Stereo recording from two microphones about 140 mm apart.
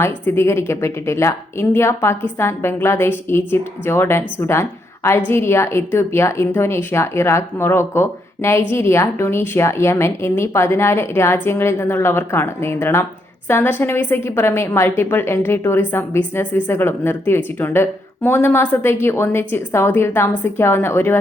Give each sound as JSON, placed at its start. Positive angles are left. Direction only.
{"t": 0.0, "sound": "a woman's voice", "side_deg": 20}